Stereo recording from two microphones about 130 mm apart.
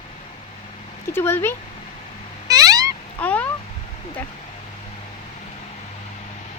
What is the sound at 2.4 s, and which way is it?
Cat, 25° right (ahead or behind).